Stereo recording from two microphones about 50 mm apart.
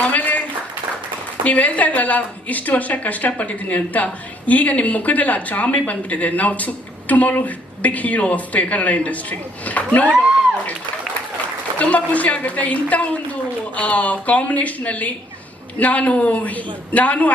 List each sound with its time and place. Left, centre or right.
0.0 s a sound: left
1.5 s a woman's voice: left
11.8 s a woman's voice: left